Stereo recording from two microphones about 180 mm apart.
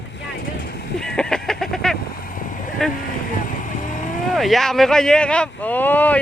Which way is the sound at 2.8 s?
Centre (ahead or behind).